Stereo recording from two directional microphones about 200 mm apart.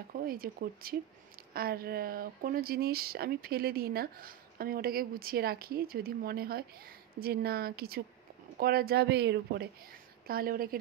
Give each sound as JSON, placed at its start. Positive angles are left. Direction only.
{"t": 0.1, "sound": "speech", "side_deg": -45}